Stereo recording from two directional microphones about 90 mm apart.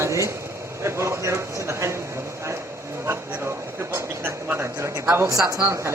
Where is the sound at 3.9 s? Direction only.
25° right (ahead or behind).